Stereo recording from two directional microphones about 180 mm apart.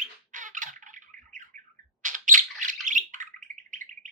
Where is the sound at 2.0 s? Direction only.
45° right (ahead or behind).